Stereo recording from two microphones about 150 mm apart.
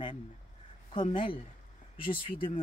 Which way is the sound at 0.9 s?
35° left (ahead or behind).